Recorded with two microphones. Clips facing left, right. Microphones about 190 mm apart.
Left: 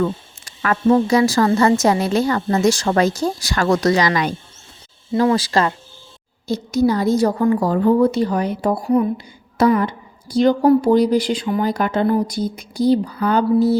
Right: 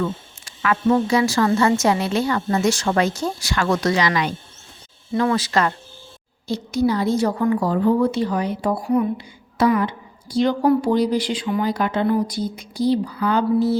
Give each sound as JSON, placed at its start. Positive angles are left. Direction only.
{"t": 0.0, "sound": "speech", "side_deg": 40}
{"t": 5.1, "sound": "speech", "side_deg": 30}
{"t": 6.5, "sound": "a woman's voice", "side_deg": 40}